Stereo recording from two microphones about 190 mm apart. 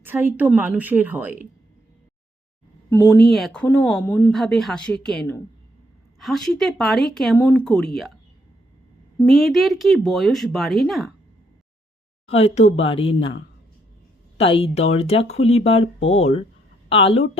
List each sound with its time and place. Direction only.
0.0 s a woman's voice: 10° right (ahead or behind)
2.9 s speech: 15° left (ahead or behind)
3.2 s a woman's voice: centre (ahead or behind)
7.3 s speech: 15° left (ahead or behind)
7.6 s speech: centre (ahead or behind)
9.1 s speech: centre (ahead or behind)
12.4 s speech: 35° left (ahead or behind)
14.3 s speech: 30° left (ahead or behind)